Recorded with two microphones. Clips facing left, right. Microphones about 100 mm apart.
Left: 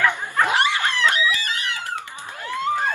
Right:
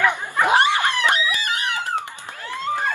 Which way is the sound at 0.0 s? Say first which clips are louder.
Right 1 dB; 15° right (ahead or behind).